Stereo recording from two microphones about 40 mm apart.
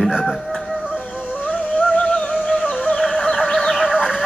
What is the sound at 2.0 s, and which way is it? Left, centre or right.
Music, left.